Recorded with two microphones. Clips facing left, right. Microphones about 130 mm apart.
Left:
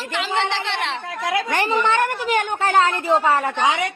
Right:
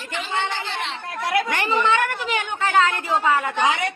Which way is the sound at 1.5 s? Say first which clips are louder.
Left 1 dB; 40° left (ahead or behind).